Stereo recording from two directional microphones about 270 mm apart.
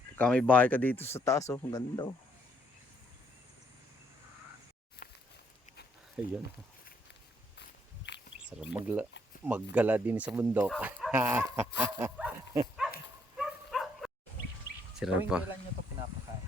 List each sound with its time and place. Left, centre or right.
0.2 s speech: centre
5.0 s a sound: left
6.2 s speech: centre
8.1 s a sound: left
8.4 s speech: centre
13.3 s bow-wow: centre
14.9 s speech: centre